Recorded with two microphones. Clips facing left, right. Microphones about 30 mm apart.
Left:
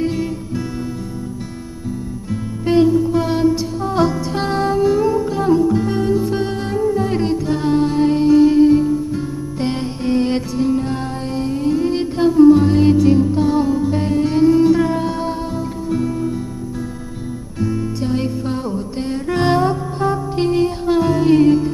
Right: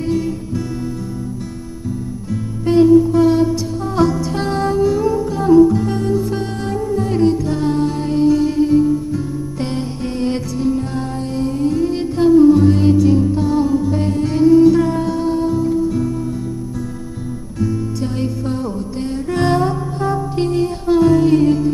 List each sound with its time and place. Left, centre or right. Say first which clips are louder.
0.0 s music: right 1 dB; centre
2.3 s music: right 1 dB; centre
17.6 s music: even; centre